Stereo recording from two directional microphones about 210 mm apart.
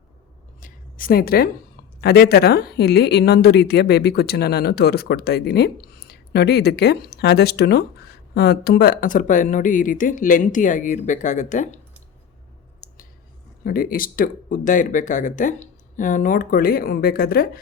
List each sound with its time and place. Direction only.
0.6 s a sound: 40° left (ahead or behind)
2.0 s speech: 50° left (ahead or behind)
13.7 s speech: 45° left (ahead or behind)